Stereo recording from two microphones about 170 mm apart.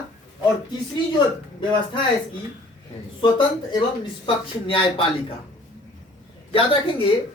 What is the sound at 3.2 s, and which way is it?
Speech, 30° left (ahead or behind).